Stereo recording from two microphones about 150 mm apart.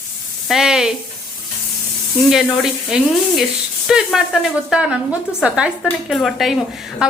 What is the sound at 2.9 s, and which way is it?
A woman's voice, 5° right (ahead or behind).